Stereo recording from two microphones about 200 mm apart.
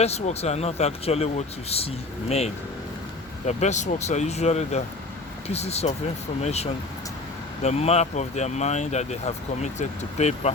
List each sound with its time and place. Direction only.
0.0 s speech: 30° left (ahead or behind)
3.4 s speech: 35° left (ahead or behind)